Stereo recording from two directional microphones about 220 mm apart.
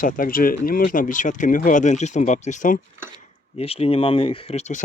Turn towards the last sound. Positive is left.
turn(degrees=30)  # may be behind; listen again after turning